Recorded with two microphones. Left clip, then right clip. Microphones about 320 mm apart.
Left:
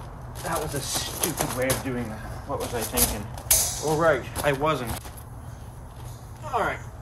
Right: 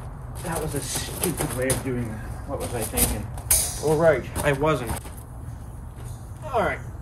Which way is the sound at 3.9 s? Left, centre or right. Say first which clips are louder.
Right 3 dB; centre.